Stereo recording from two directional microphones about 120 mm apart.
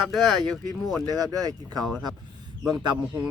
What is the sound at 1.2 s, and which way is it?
Speech, 30° right (ahead or behind).